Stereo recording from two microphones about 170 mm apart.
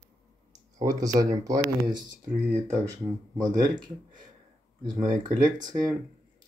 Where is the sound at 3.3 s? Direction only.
25° right (ahead or behind).